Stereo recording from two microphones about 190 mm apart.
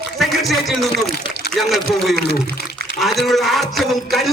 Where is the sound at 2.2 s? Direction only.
55° left (ahead or behind).